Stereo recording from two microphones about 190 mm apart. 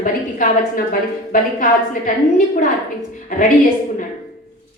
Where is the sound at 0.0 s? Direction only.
45° left (ahead or behind).